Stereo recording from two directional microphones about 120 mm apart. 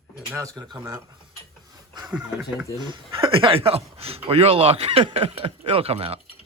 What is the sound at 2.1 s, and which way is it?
Speech, 5° right (ahead or behind).